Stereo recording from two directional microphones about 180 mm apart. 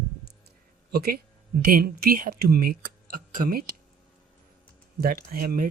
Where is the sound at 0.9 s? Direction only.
60° right (ahead or behind).